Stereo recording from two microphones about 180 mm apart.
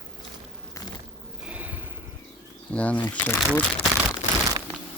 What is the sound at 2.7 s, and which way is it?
Speech, 10° left (ahead or behind).